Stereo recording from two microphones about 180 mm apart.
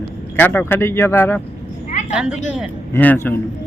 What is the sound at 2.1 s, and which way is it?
Speech, 5° right (ahead or behind).